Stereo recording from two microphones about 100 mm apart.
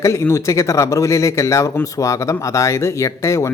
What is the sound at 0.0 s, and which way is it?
Speech, 30° left (ahead or behind).